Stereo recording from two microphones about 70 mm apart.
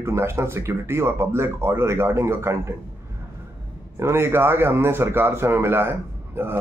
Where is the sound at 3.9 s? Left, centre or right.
Right.